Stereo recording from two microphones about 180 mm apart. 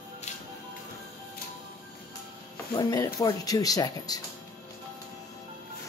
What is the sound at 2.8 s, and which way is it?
Speech, 20° left (ahead or behind).